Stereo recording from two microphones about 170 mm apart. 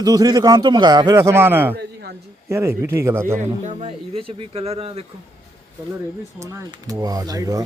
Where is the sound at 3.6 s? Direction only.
40° right (ahead or behind).